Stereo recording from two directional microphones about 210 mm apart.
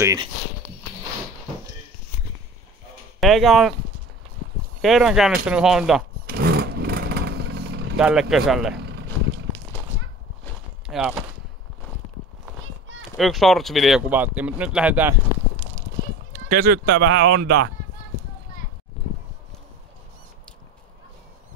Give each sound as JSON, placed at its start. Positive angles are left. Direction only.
{"t": 0.0, "sound": "speech", "side_deg": -15}
{"t": 3.2, "sound": "speech", "side_deg": 0}
{"t": 4.8, "sound": "speech", "side_deg": 0}
{"t": 6.2, "sound": "vehicle", "side_deg": -45}
{"t": 8.0, "sound": "speech", "side_deg": -5}
{"t": 10.9, "sound": "speech", "side_deg": -5}
{"t": 13.2, "sound": "speech", "side_deg": 0}
{"t": 15.6, "sound": "clip-clop", "side_deg": -10}
{"t": 16.3, "sound": "speech", "side_deg": -40}